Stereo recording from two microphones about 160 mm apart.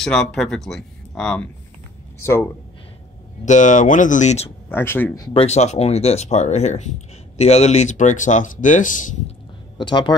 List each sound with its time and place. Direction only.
0.0 s speech: 5° left (ahead or behind)
3.4 s speech: 50° left (ahead or behind)
4.6 s speech: 15° left (ahead or behind)
5.3 s speech: 40° left (ahead or behind)
9.8 s speech: 30° left (ahead or behind)